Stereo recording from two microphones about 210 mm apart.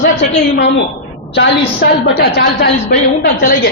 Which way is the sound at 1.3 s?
55° left (ahead or behind).